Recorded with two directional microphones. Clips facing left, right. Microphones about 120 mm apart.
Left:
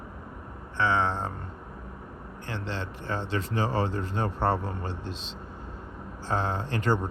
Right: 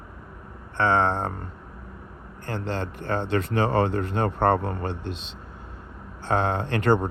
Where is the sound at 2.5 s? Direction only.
50° right (ahead or behind).